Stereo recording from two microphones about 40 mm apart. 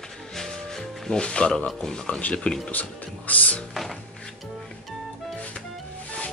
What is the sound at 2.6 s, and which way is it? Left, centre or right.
Speech, left.